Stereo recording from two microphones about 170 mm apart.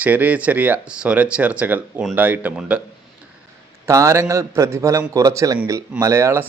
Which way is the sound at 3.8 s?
15° right (ahead or behind).